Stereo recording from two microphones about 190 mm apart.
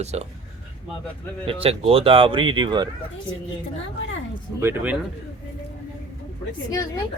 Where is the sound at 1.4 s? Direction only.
30° right (ahead or behind).